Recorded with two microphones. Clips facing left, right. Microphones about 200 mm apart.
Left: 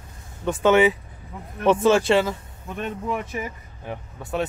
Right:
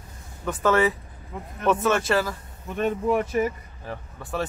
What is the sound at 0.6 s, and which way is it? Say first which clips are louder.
Speech: left 4 dB; 20° left (ahead or behind).